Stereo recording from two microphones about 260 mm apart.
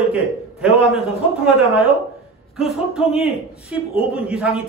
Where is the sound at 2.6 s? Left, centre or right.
Centre.